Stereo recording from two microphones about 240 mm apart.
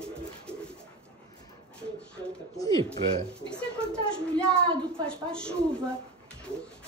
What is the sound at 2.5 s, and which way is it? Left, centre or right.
Speech, centre.